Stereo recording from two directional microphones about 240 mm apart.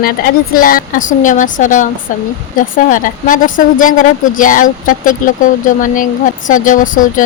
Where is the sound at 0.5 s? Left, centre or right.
Left.